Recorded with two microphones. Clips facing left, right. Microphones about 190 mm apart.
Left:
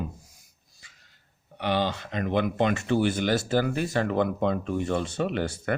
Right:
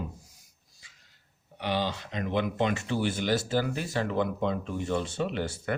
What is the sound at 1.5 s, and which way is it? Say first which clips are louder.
Speech: left 3 dB; 60° left (ahead or behind).